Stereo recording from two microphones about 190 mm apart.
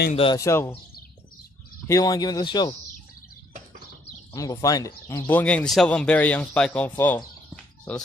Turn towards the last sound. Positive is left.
turn(degrees=10)  # may be behind; listen again after turning